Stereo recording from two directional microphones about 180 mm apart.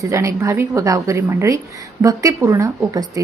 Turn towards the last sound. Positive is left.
turn(degrees=-20)  # may be behind; listen again after turning